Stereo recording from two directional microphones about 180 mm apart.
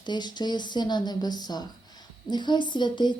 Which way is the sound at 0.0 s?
25° left (ahead or behind).